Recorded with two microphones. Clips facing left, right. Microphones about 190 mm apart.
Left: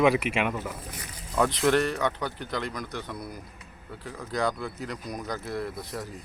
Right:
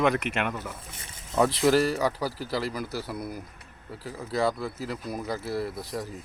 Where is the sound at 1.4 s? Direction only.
Centre (ahead or behind).